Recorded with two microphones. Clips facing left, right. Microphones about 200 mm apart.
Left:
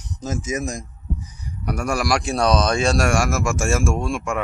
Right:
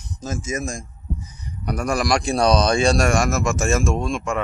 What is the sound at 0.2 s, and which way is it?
Speech, 20° left (ahead or behind).